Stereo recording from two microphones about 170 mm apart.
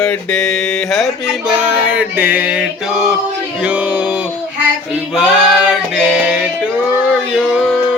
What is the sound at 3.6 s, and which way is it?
Music, 10° right (ahead or behind).